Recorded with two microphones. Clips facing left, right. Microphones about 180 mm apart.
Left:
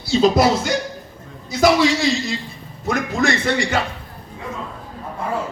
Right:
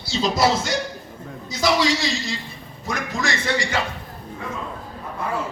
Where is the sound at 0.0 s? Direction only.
55° left (ahead or behind).